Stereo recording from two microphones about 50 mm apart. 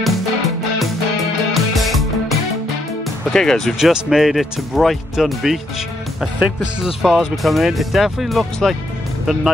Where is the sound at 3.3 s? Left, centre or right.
Centre.